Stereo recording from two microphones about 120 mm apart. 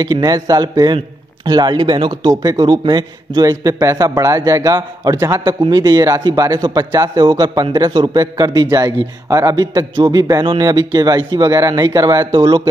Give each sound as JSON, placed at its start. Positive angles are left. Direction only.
{"t": 0.0, "sound": "speech", "side_deg": -35}